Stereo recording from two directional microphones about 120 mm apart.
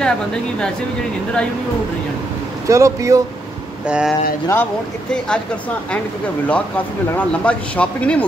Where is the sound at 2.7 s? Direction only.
25° right (ahead or behind).